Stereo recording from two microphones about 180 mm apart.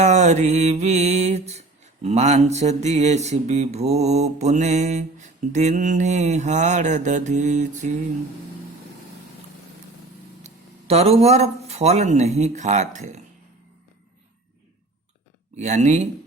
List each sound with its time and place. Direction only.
0.0 s music: 40° right (ahead or behind)
10.4 s speech: 35° right (ahead or behind)
15.5 s music: 40° right (ahead or behind)